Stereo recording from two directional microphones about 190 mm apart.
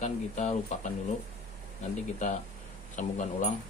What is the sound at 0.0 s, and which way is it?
Speech, 40° left (ahead or behind).